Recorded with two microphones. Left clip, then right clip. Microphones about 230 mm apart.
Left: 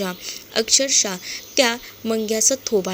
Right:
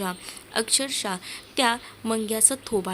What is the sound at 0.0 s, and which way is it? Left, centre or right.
A woman's voice, centre.